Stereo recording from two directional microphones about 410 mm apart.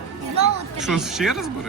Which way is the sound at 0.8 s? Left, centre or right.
Centre.